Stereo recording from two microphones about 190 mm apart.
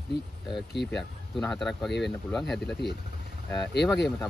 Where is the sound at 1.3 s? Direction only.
Centre (ahead or behind).